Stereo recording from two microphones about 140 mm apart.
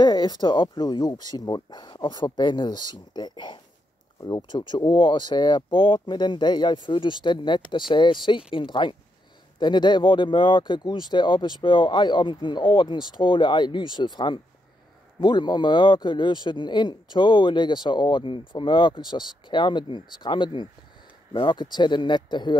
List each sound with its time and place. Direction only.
0.0 s speech: 30° left (ahead or behind)